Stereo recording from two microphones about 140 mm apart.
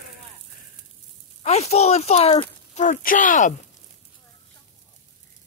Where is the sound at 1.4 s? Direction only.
50° left (ahead or behind).